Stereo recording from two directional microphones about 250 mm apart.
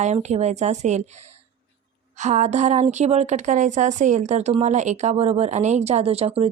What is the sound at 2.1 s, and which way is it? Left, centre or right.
A woman's voice, right.